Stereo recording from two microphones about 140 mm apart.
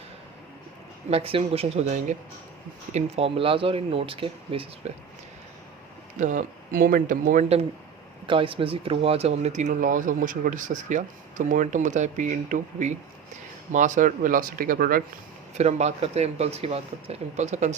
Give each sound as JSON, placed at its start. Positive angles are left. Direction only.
{"t": 1.1, "sound": "speech", "side_deg": -45}
{"t": 2.9, "sound": "speech", "side_deg": -45}
{"t": 6.1, "sound": "speech", "side_deg": -65}
{"t": 8.3, "sound": "speech", "side_deg": -40}
{"t": 15.5, "sound": "speech", "side_deg": -50}